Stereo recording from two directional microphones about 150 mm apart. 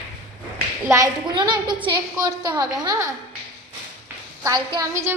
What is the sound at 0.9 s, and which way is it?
A woman's voice, 20° right (ahead or behind).